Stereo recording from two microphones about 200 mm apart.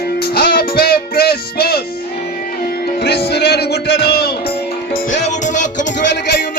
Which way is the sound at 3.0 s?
55° left (ahead or behind).